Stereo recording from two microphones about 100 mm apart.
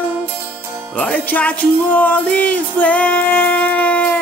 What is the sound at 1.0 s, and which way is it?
Music, 15° left (ahead or behind).